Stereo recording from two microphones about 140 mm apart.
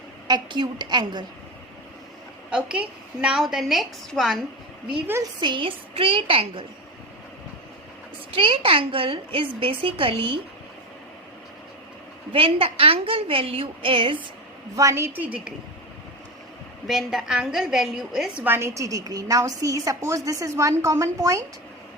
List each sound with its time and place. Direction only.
0.3 s a woman's voice: 30° right (ahead or behind)
2.5 s a woman's voice: 5° right (ahead or behind)
4.9 s a woman's voice: 10° right (ahead or behind)
5.2 s a woman's voice: 35° right (ahead or behind)
8.3 s a woman's voice: 40° right (ahead or behind)
12.3 s a woman's voice: 40° right (ahead or behind)
14.8 s a woman's voice: 20° right (ahead or behind)
16.8 s a woman's voice: centre (ahead or behind); by 21.4 s 20° right (ahead or behind)